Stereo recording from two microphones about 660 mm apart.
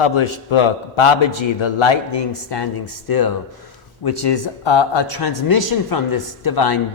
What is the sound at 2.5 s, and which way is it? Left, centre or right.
Speech, left.